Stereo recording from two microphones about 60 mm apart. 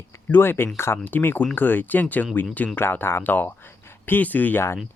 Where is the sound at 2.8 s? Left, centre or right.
Left.